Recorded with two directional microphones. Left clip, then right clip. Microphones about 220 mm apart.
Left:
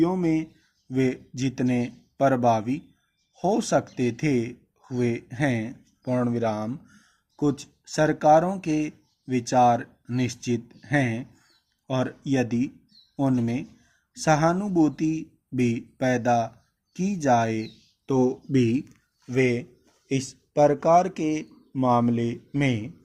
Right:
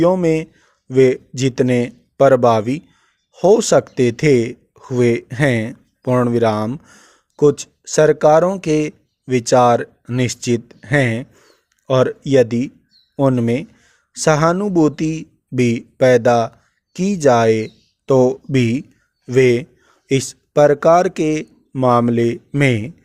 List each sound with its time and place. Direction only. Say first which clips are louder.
0.0 s speech: right 9 dB; 45° right (ahead or behind)